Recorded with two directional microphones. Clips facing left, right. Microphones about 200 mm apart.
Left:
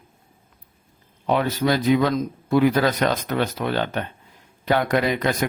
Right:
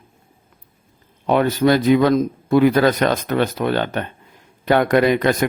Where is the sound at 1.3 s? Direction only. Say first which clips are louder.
Right 5 dB; 55° right (ahead or behind).